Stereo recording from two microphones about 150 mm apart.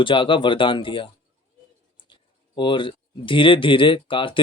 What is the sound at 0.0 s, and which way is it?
Speech, 35° left (ahead or behind).